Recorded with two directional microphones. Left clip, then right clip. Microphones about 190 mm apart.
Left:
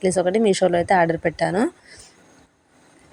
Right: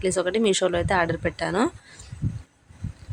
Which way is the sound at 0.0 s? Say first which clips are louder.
Left 4 dB; 5° left (ahead or behind).